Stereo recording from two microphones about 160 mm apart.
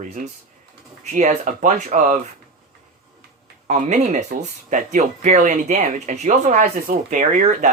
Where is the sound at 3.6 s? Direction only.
45° right (ahead or behind).